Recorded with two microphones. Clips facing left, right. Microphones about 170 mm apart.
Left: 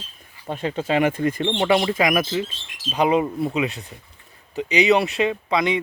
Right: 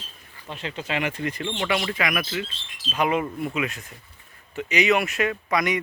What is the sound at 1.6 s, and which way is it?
Speech, 30° left (ahead or behind).